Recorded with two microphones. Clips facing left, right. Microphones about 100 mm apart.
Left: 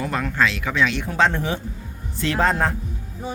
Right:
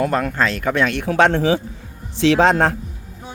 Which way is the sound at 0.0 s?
50° right (ahead or behind).